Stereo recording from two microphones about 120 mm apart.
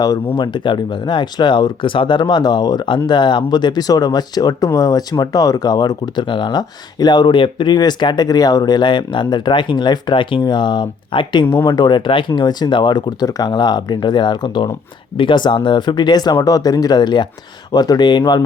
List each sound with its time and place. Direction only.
0.3 s speech: 40° left (ahead or behind)